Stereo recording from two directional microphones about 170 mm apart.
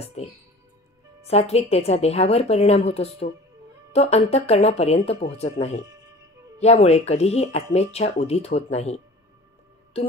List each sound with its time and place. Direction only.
0.0 s speech: 40° left (ahead or behind)
5.9 s music: 20° right (ahead or behind)
6.6 s speech: 40° left (ahead or behind)